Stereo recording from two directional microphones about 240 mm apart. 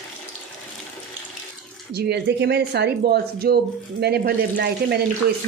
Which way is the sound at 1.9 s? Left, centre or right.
Right.